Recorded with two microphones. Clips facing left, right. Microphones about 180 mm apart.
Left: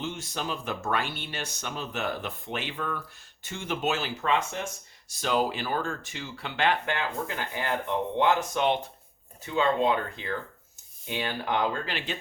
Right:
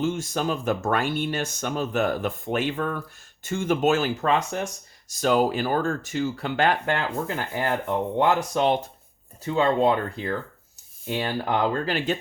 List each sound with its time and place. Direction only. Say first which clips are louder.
0.0 s speech: right 8 dB; 45° right (ahead or behind)